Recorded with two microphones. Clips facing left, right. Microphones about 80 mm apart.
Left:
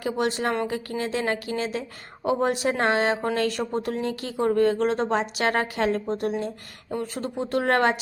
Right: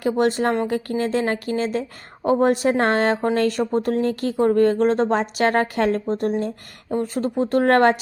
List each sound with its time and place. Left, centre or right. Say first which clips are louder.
0.0 s speech: right 6 dB; right